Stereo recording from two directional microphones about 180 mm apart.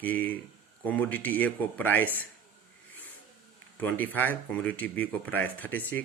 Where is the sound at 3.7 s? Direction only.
10° left (ahead or behind).